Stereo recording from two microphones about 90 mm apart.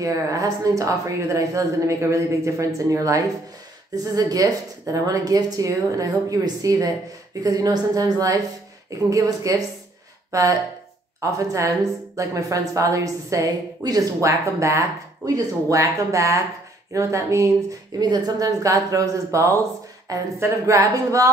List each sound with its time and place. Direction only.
0.0 s a woman's voice: 40° right (ahead or behind)
18.0 s a woman's voice: 50° right (ahead or behind)